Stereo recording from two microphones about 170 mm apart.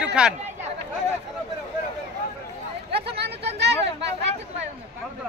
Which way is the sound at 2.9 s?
75° right (ahead or behind).